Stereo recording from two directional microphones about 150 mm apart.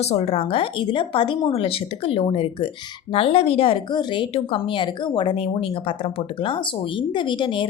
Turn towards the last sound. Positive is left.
turn(degrees=35)  # may be behind; listen again after turning